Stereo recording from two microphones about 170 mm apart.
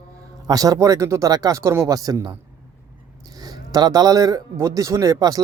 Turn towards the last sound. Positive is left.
turn(degrees=-20)  # may be behind; listen again after turning